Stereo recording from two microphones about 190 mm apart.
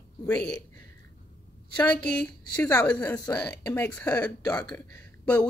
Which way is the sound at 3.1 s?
20° left (ahead or behind).